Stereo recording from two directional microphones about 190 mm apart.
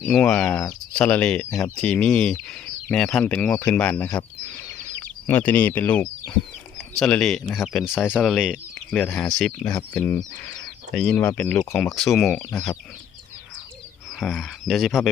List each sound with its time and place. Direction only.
0.0 s speech: centre (ahead or behind)
1.7 s speech: 5° left (ahead or behind)
4.4 s bird: 10° left (ahead or behind)
7.0 s speech: 5° left (ahead or behind)
8.3 s speech: 5° right (ahead or behind)
9.0 s speech: 10° left (ahead or behind)
11.9 s speech: centre (ahead or behind)
14.2 s speech: centre (ahead or behind)